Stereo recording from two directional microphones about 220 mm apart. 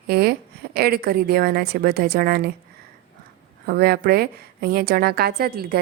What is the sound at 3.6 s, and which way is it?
A woman's voice, 45° right (ahead or behind).